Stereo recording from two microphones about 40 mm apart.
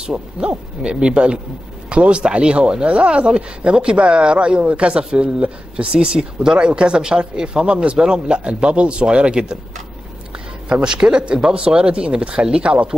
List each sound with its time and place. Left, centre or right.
0.0 s speech: right
10.7 s speech: right